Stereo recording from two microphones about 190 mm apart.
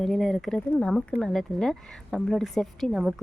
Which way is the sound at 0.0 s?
Centre (ahead or behind).